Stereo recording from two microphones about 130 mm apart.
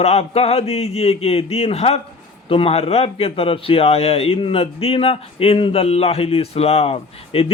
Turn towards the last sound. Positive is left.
turn(degrees=50)  # may be behind; listen again after turning